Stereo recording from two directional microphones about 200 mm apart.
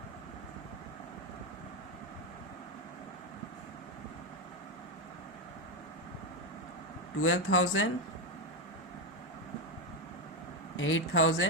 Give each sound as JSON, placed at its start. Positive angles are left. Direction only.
{"t": 7.2, "sound": "speech", "side_deg": 90}
{"t": 10.8, "sound": "speech", "side_deg": 75}